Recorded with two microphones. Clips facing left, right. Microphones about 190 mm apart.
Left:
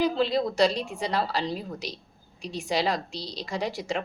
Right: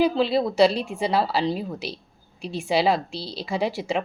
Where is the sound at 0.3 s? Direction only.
5° right (ahead or behind).